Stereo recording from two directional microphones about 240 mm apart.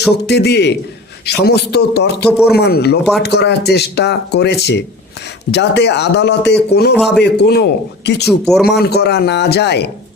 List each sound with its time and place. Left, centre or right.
0.1 s speech: left
6.9 s speech: centre
7.2 s speech: left
8.2 s speech: centre
8.6 s speech: left